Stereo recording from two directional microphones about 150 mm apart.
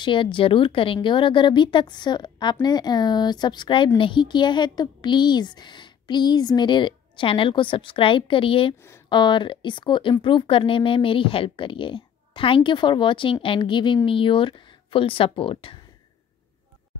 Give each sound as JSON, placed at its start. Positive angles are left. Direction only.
{"t": 0.0, "sound": "speech", "side_deg": 35}